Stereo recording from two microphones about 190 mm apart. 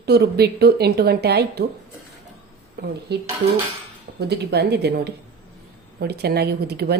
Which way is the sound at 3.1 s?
60° right (ahead or behind).